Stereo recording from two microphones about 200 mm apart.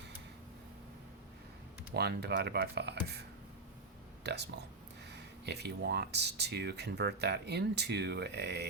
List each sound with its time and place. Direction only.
1.9 s speech: 55° right (ahead or behind)
4.2 s speech: 55° right (ahead or behind)